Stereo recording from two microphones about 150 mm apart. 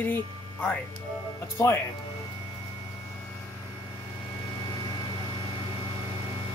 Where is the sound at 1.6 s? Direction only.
20° left (ahead or behind).